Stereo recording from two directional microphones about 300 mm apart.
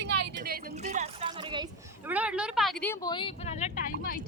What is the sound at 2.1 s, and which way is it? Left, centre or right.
Speech, centre.